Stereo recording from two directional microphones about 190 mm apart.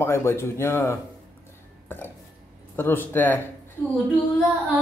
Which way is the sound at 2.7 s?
10° left (ahead or behind).